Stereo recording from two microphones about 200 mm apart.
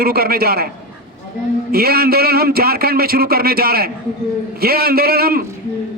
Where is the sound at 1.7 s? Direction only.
50° right (ahead or behind).